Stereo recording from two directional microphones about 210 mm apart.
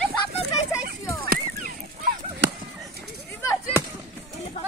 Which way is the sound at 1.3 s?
40° right (ahead or behind).